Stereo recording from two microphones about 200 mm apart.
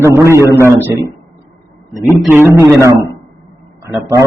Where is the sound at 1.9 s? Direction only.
15° left (ahead or behind).